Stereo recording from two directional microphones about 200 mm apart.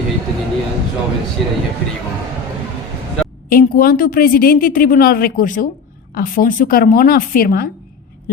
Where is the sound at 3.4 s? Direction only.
45° left (ahead or behind).